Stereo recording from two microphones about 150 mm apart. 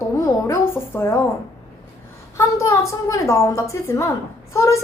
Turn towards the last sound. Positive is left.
turn(degrees=20)  # may be behind; listen again after turning